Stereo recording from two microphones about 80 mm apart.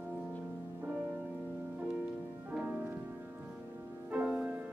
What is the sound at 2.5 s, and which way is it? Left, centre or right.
Music, right.